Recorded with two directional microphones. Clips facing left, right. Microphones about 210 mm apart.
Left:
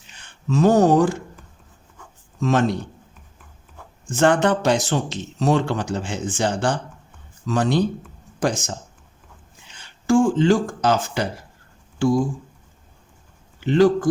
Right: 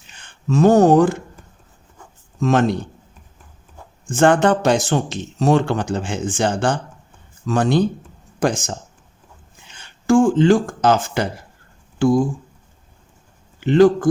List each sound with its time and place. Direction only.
0.1 s speech: 50° right (ahead or behind)
2.4 s speech: 50° right (ahead or behind)
4.1 s speech: 50° right (ahead or behind)
9.7 s speech: 50° right (ahead or behind)
13.7 s speech: 50° right (ahead or behind)